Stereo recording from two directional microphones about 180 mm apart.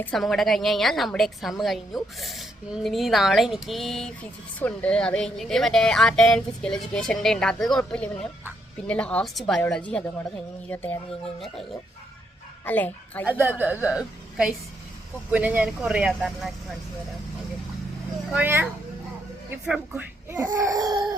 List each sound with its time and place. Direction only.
0.0 s a woman's voice: centre (ahead or behind)
11.3 s a woman's voice: centre (ahead or behind)
12.6 s a woman's voice: 10° left (ahead or behind)
13.2 s a woman's voice: 10° right (ahead or behind)
18.3 s speech: 10° right (ahead or behind)